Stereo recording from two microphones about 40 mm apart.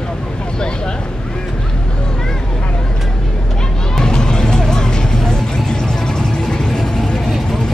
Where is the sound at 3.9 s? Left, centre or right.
Centre.